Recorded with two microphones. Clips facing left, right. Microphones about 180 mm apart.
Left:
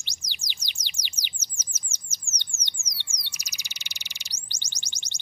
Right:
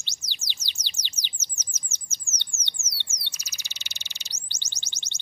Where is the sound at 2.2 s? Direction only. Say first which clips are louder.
Right 1 dB; 55° left (ahead or behind).